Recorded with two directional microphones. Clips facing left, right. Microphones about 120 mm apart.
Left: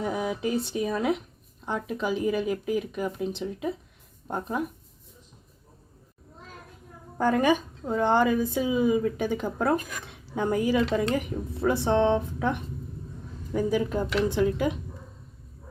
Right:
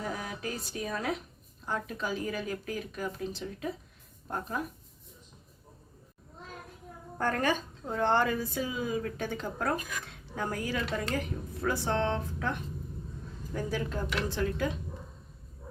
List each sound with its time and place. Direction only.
0.0 s a woman's voice: 15° left (ahead or behind)
7.2 s a woman's voice: 10° left (ahead or behind)